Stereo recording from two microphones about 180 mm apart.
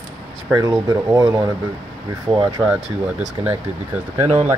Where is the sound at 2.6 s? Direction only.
5° right (ahead or behind).